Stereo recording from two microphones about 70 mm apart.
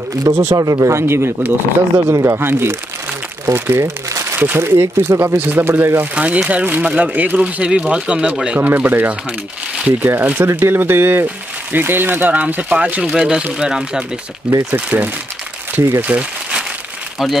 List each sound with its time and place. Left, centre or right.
0.4 s speech: right
4.1 s crumpling: right
4.4 s speech: right
6.1 s speech: right
14.7 s speech: right